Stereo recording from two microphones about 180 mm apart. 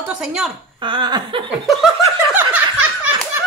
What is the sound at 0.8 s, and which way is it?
Speech, 25° right (ahead or behind).